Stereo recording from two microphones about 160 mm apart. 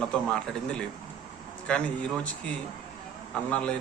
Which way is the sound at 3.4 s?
5° left (ahead or behind).